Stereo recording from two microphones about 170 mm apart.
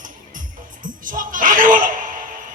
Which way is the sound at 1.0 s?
50° right (ahead or behind).